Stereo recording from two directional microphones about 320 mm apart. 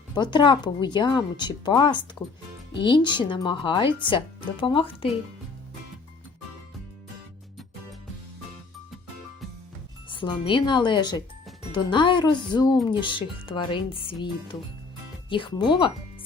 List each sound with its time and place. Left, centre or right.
0.1 s speech: centre
10.1 s speech: centre